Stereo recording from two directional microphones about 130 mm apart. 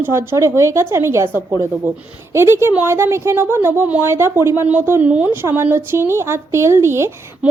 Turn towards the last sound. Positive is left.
turn(degrees=-20)  # may be behind; listen again after turning